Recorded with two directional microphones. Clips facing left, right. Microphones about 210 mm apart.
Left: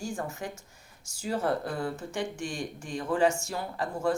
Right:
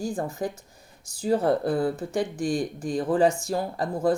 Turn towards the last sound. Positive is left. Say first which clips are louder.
# right 5 dB
turn(degrees=-35)  # may be behind; listen again after turning